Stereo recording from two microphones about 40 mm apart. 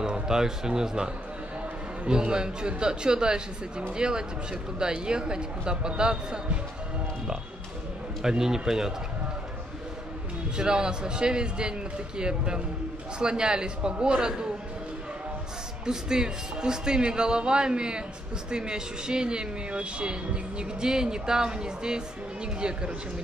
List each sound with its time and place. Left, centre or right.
0.0 s speech: centre
8.2 s a man's voice: centre
10.6 s speech: right
15.8 s speech: centre